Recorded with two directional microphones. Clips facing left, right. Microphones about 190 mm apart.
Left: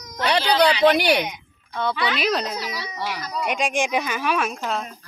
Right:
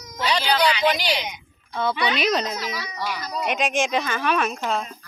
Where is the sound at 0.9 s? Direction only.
60° left (ahead or behind).